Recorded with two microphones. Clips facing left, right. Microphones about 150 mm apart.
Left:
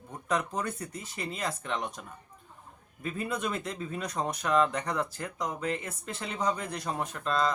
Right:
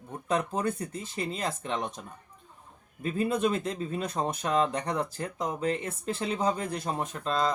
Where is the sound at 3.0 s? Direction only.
30° right (ahead or behind).